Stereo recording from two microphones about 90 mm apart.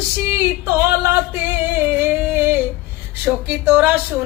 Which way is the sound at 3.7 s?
20° right (ahead or behind).